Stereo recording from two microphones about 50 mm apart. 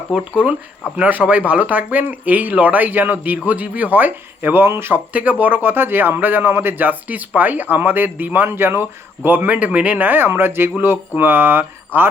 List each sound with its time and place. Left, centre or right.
0.1 s speech: right
5.1 s speech: right
8.4 s speech: right